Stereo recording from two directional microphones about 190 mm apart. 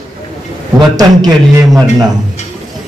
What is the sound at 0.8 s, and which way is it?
Speech, 20° right (ahead or behind).